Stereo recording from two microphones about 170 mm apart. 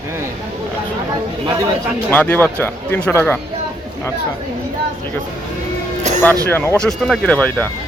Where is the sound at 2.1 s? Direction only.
10° left (ahead or behind).